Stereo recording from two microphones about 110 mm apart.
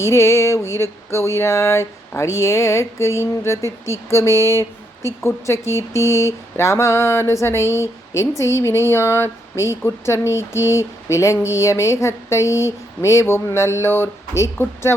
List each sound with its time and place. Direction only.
0.0 s speech: 25° left (ahead or behind)